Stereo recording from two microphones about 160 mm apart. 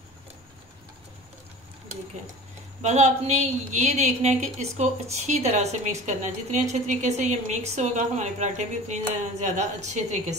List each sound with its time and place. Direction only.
2.8 s a woman's voice: 45° right (ahead or behind)